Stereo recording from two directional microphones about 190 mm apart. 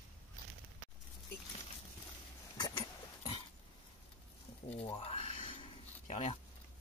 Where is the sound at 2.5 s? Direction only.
20° left (ahead or behind).